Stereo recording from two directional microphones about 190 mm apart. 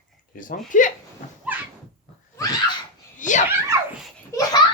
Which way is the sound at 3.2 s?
40° left (ahead or behind).